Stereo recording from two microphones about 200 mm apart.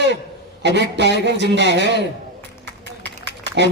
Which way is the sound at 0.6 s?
60° right (ahead or behind).